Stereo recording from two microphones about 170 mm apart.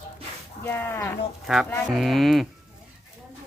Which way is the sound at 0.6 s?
15° left (ahead or behind).